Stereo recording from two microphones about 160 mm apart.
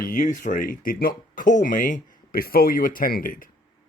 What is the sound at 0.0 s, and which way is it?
Speech, 55° left (ahead or behind).